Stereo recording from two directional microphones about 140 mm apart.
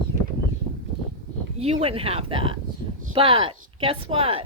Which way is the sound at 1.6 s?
45° right (ahead or behind).